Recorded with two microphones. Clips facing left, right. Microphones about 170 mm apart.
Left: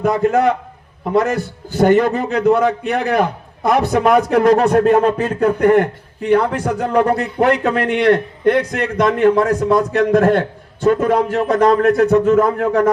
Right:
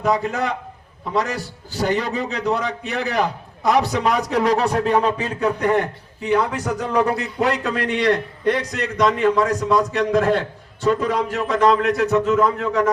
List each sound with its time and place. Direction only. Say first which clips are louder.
0.0 s a man's voice: left 7 dB; 50° left (ahead or behind)